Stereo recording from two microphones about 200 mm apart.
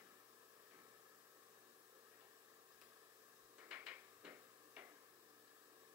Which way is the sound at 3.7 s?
10° right (ahead or behind).